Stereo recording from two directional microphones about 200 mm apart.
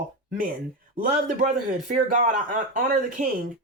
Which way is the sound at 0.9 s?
40° right (ahead or behind).